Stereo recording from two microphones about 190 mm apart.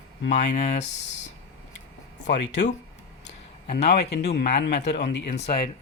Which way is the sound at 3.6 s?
55° left (ahead or behind).